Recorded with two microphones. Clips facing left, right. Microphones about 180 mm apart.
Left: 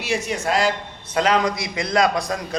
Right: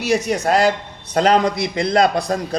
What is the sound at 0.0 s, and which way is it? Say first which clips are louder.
A man's voice: right 6 dB; 40° right (ahead or behind).